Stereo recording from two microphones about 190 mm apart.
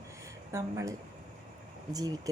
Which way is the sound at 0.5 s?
15° right (ahead or behind).